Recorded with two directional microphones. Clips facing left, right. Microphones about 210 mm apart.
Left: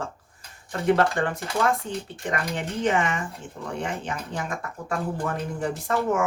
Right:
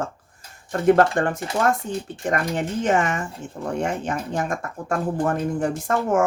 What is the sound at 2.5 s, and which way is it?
Speech, 45° right (ahead or behind).